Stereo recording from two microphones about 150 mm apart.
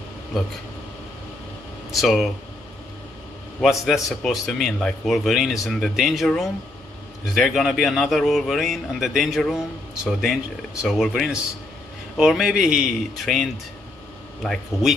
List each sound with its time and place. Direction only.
1.9 s speech: centre (ahead or behind)
3.6 s a man's voice: centre (ahead or behind)